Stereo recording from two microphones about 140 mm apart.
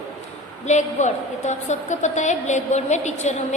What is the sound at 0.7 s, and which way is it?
A woman's voice, 55° left (ahead or behind).